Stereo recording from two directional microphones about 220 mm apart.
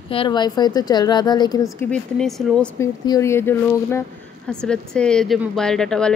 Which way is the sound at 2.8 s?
15° left (ahead or behind).